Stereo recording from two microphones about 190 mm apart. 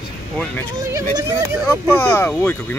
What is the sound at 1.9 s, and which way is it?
Speech, 10° left (ahead or behind).